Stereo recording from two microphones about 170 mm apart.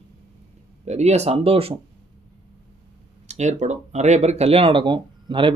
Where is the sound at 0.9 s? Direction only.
40° right (ahead or behind).